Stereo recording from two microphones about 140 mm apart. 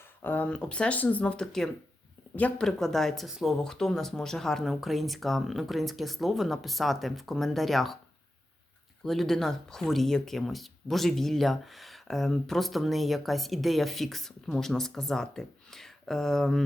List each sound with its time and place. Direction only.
0.2 s speech: 10° left (ahead or behind)
9.0 s speech: centre (ahead or behind)